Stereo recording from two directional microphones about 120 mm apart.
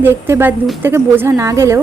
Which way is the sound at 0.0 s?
20° right (ahead or behind).